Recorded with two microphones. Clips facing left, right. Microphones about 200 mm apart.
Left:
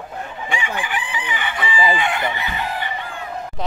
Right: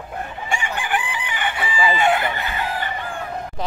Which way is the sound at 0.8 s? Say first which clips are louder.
Right 2 dB; 55° right (ahead or behind).